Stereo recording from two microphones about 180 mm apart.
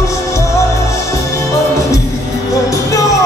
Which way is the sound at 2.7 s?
20° left (ahead or behind).